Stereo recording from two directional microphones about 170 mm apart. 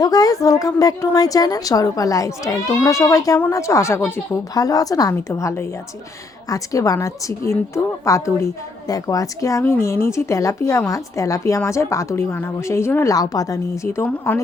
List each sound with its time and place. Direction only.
0.0 s a woman's voice: 20° left (ahead or behind)